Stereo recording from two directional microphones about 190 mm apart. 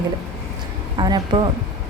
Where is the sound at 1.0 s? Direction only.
20° right (ahead or behind).